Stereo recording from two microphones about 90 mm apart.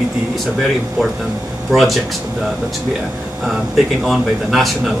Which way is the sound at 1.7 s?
Centre (ahead or behind).